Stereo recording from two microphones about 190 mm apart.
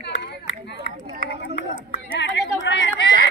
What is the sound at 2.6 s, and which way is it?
Chatter, 70° left (ahead or behind).